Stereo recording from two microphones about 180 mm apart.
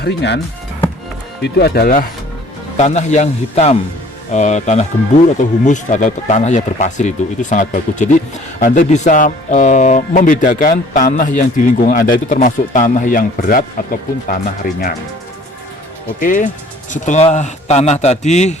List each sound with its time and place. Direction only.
0.0 s speech: 70° left (ahead or behind)
2.7 s speech: 40° left (ahead or behind)
16.2 s speech: 45° left (ahead or behind)